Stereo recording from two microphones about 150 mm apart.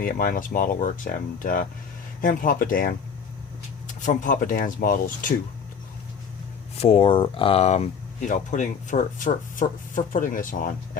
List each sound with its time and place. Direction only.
0.0 s speech: 65° left (ahead or behind)
6.7 s speech: 40° left (ahead or behind); by 10.7 s 65° left (ahead or behind)